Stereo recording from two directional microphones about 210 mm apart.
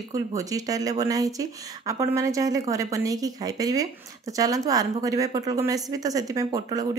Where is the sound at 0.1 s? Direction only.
15° right (ahead or behind).